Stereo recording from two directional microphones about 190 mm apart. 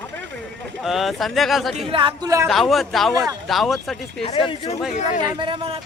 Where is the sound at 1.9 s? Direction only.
25° right (ahead or behind).